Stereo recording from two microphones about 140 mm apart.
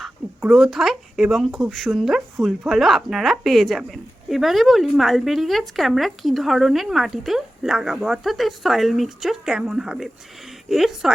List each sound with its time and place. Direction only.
0.0 s speech: 5° right (ahead or behind)